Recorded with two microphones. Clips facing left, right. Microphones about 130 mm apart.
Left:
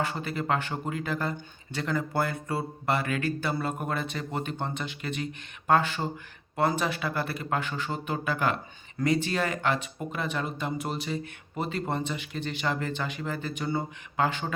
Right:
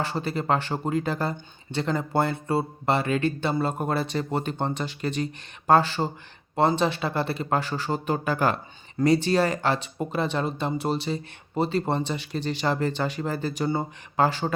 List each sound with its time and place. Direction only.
0.0 s speech: 30° right (ahead or behind)